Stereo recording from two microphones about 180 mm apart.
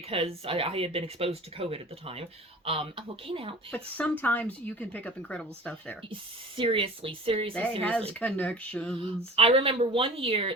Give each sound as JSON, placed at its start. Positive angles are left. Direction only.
{"t": 0.1, "sound": "speech", "side_deg": -30}
{"t": 4.2, "sound": "speech", "side_deg": 10}
{"t": 6.6, "sound": "speech", "side_deg": -30}
{"t": 7.8, "sound": "speech", "side_deg": 5}
{"t": 9.0, "sound": "speech", "side_deg": -30}